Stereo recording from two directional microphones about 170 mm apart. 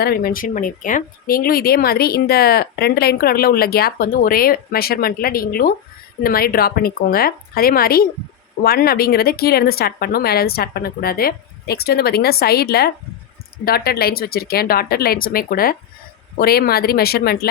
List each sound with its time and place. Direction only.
0.0 s speech: 65° left (ahead or behind)